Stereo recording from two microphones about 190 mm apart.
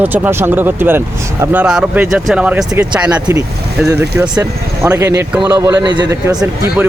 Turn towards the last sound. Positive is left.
turn(degrees=-25)  # may be behind; listen again after turning